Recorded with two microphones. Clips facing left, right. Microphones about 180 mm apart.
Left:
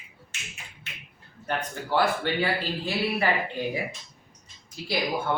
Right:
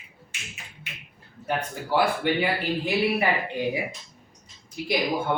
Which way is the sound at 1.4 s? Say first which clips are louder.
Right 2 dB; 10° right (ahead or behind).